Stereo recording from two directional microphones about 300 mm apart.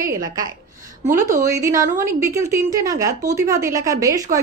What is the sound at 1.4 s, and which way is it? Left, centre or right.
A woman's voice, centre.